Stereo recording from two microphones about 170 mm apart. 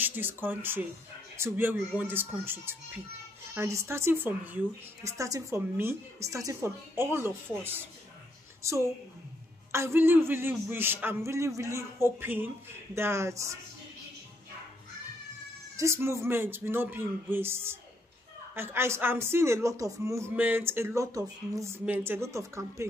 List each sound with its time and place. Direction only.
0.0 s a woman's voice: 10° right (ahead or behind)
15.7 s a woman's voice: 15° right (ahead or behind)